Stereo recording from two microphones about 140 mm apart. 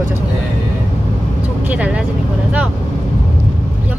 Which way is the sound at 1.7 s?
10° right (ahead or behind).